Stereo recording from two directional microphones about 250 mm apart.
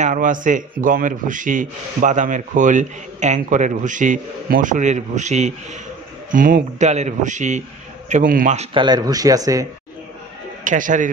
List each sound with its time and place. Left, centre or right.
0.0 s a man's voice: right; by 9.7 s centre
10.6 s speech: right